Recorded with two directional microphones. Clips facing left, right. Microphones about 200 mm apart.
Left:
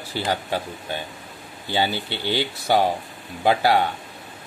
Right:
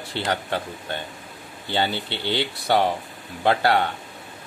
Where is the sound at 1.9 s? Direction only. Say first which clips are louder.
Left 1 dB; 25° right (ahead or behind).